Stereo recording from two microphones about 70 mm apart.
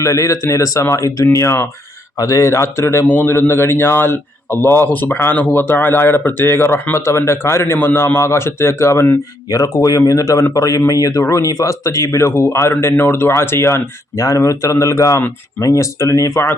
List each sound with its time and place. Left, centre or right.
0.0 s speech: left
2.1 s a man's voice: left
9.7 s speech: left